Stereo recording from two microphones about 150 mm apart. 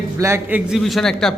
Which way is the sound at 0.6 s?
5° right (ahead or behind).